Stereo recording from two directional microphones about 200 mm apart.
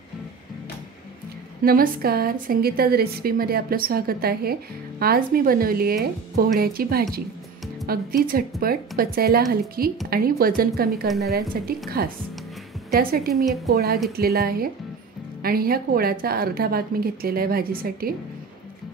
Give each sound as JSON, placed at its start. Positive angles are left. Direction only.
{"t": 1.6, "sound": "a woman's voice", "side_deg": -50}
{"t": 11.1, "sound": "a woman's voice", "side_deg": 0}
{"t": 11.6, "sound": "a woman's voice", "side_deg": -50}